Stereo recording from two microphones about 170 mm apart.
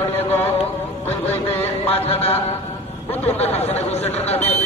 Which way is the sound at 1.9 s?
35° left (ahead or behind).